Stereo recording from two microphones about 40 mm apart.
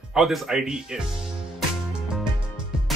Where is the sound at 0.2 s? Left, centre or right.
Centre.